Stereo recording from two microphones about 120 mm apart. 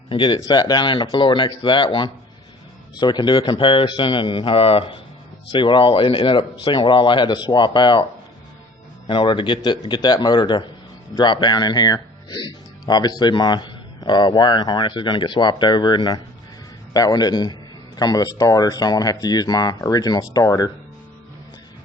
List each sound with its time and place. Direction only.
0.1 s a man's voice: 40° left (ahead or behind)
9.0 s speech: 40° left (ahead or behind)